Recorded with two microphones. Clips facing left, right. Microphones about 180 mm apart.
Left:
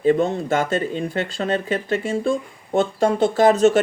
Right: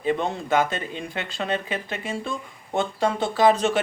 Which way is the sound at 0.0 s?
45° left (ahead or behind).